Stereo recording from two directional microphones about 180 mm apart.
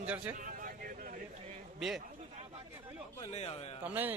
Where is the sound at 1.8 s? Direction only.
Centre (ahead or behind).